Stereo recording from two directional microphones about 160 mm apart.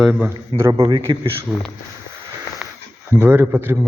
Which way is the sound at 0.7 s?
35° right (ahead or behind).